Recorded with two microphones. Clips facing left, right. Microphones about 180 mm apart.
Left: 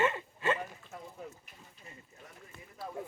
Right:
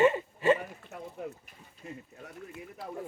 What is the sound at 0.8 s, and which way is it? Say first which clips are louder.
Speech: right 6 dB; 60° right (ahead or behind).